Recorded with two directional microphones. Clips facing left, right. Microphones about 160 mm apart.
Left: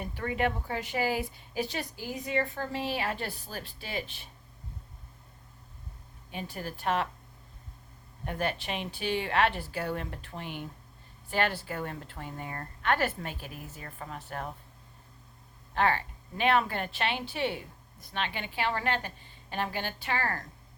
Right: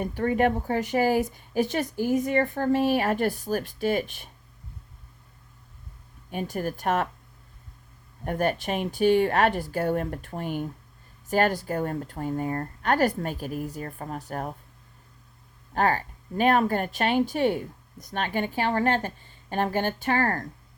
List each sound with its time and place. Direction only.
0.0 s speech: 45° right (ahead or behind)
6.3 s speech: 45° right (ahead or behind)
8.2 s speech: 45° right (ahead or behind)
15.7 s speech: 40° right (ahead or behind)